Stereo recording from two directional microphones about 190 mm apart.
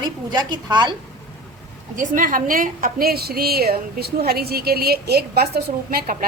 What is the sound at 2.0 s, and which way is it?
A woman's voice, 45° right (ahead or behind).